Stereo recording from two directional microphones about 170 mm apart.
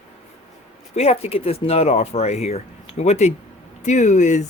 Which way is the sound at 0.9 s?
35° left (ahead or behind).